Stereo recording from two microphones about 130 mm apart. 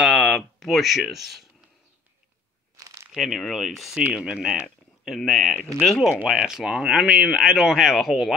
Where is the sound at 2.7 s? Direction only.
25° right (ahead or behind).